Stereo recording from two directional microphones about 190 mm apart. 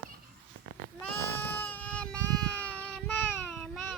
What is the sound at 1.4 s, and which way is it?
Child singing, 10° left (ahead or behind).